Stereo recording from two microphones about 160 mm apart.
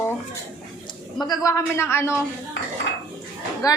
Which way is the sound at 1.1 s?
25° left (ahead or behind).